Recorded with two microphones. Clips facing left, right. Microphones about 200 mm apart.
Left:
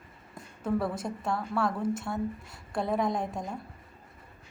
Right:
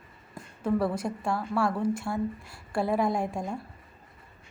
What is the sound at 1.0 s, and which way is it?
A woman's voice, 5° right (ahead or behind).